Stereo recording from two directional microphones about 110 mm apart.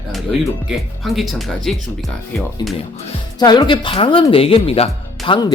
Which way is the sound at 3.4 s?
40° left (ahead or behind).